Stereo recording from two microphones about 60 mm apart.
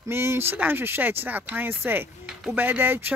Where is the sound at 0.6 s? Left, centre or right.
Right.